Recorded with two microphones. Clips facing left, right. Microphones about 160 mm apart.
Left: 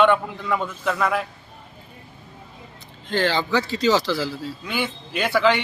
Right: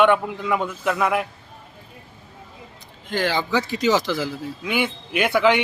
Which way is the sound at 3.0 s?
10° right (ahead or behind).